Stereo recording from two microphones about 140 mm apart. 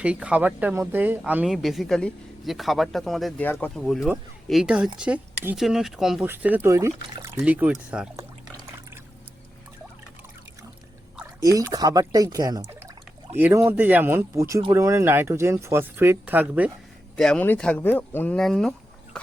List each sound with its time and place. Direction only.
0.0 s speech: 10° right (ahead or behind)
3.4 s speech: 10° left (ahead or behind)
3.8 s speech: centre (ahead or behind)
6.2 s speech: 15° right (ahead or behind)
7.4 s speech: 10° right (ahead or behind)
11.3 s speech: 25° right (ahead or behind)
13.3 s speech: 15° right (ahead or behind)
17.2 s speech: 5° left (ahead or behind)